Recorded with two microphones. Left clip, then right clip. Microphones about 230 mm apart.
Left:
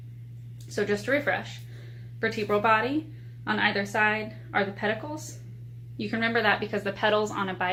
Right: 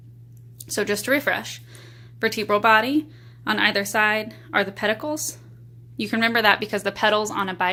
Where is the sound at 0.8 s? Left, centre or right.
Right.